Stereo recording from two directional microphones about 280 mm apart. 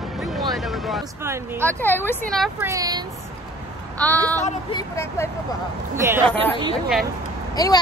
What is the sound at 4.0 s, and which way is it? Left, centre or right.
A woman's voice, centre.